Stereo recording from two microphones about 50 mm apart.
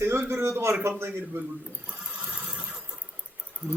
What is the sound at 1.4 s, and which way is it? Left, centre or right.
Speech, right.